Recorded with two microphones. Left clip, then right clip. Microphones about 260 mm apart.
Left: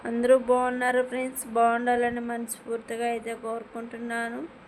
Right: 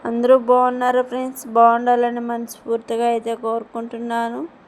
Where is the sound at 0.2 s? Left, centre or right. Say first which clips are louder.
Right 7 dB; centre.